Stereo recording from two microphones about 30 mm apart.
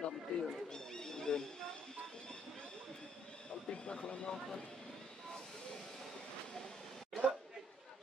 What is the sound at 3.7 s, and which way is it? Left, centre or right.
Speech, left.